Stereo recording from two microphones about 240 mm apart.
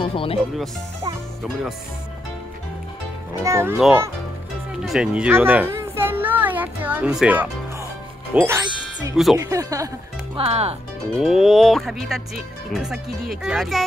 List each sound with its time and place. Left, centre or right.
0.0 s speech: left
3.4 s speech: centre
4.8 s a sound: centre
8.4 s speech: centre
9.1 s speech: centre
9.4 s speech: centre
10.3 s speech: right
11.1 s speech: centre